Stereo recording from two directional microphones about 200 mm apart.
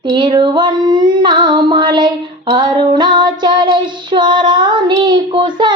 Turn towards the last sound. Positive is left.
turn(degrees=-25)  # may be behind; listen again after turning